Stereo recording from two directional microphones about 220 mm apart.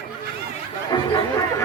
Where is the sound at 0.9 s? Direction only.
20° left (ahead or behind).